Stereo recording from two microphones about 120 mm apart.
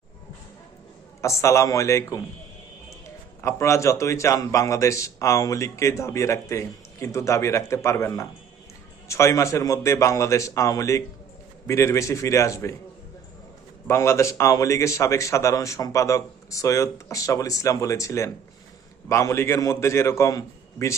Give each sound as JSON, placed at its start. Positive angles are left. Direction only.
{"t": 1.2, "sound": "a man's voice", "side_deg": 25}
{"t": 3.4, "sound": "a man's voice", "side_deg": 25}
{"t": 13.8, "sound": "a man's voice", "side_deg": 20}